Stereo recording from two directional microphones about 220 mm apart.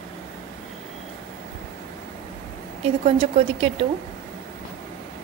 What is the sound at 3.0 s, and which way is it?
Speech, 25° right (ahead or behind).